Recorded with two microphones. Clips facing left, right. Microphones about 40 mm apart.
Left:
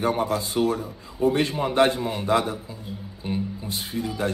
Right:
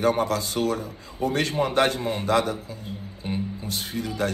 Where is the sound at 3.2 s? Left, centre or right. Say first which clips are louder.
Left 1 dB; centre.